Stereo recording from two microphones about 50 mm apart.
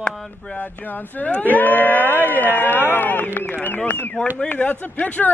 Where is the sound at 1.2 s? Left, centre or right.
Left.